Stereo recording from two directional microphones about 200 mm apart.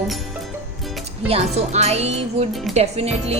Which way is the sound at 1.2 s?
30° right (ahead or behind).